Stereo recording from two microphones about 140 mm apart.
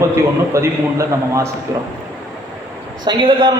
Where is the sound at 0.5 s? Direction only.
20° right (ahead or behind).